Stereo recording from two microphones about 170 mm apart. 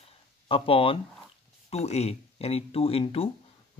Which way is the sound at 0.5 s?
35° left (ahead or behind).